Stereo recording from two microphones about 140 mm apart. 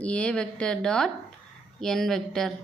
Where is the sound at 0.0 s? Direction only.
10° left (ahead or behind).